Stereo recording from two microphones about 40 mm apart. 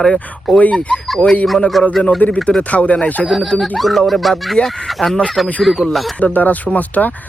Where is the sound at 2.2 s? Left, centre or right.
Left.